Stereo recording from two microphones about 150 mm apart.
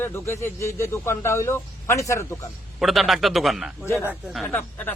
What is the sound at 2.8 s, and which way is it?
A man's voice, centre (ahead or behind).